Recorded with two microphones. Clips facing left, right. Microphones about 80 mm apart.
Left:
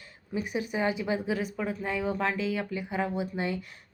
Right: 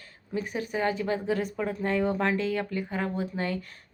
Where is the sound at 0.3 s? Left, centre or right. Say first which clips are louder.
Even; centre.